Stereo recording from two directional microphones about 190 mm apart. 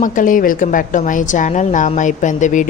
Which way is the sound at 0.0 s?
45° left (ahead or behind).